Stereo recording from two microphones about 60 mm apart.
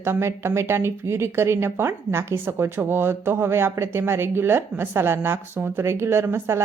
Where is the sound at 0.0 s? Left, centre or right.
Right.